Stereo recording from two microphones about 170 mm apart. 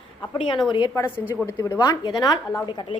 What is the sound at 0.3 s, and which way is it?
A woman's voice, 30° left (ahead or behind).